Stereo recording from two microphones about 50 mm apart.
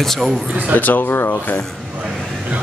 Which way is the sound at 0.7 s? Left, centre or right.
Left.